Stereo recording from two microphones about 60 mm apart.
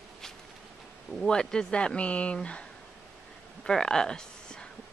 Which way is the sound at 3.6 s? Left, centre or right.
Centre.